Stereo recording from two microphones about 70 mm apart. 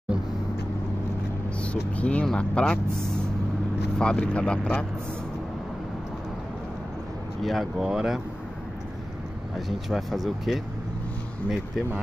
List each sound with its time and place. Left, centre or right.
1.6 s speech: centre
4.0 s speech: centre
7.4 s speech: centre
9.7 s speech: centre